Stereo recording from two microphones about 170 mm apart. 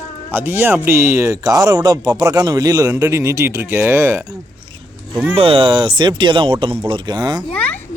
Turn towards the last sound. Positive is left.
turn(degrees=-25)  # may be behind; listen again after turning